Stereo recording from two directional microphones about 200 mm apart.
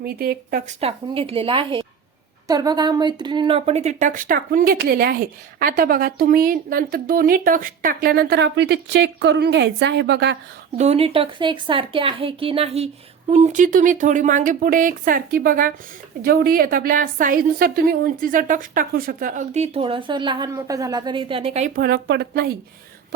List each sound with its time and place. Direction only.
0.0 s speech: 45° right (ahead or behind)
0.8 s a woman's voice: 30° right (ahead or behind); by 10.3 s 60° right (ahead or behind)
10.8 s a woman's voice: 30° right (ahead or behind)
21.8 s speech: 45° right (ahead or behind)